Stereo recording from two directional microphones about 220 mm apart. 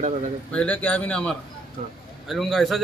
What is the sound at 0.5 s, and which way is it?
Speech, 5° left (ahead or behind).